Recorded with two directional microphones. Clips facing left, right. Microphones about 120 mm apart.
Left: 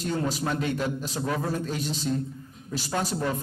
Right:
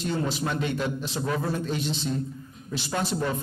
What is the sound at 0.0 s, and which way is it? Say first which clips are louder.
Speech: even; 40° left (ahead or behind).